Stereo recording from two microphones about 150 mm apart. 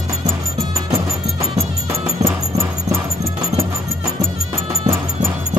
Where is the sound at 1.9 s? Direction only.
20° right (ahead or behind).